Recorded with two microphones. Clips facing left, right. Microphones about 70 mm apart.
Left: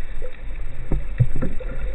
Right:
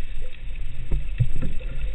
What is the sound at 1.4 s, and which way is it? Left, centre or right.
Rowboat, left.